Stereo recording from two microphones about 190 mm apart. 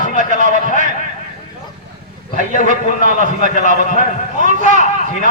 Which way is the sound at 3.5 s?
40° left (ahead or behind).